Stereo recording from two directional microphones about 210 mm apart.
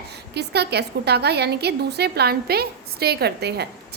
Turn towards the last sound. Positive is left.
turn(degrees=-50)  # may be behind; listen again after turning